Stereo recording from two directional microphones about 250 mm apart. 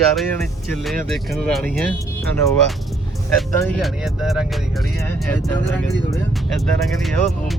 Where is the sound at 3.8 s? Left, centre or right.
Centre.